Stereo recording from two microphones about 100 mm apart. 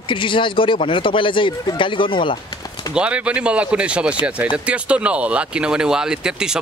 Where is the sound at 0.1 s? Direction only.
55° left (ahead or behind).